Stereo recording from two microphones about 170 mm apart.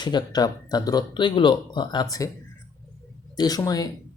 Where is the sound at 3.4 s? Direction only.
20° left (ahead or behind).